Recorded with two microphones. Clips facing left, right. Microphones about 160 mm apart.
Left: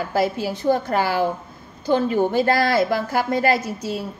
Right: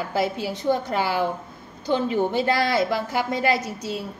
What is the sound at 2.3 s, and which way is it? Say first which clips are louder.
A woman's voice: left 4 dB; 45° left (ahead or behind).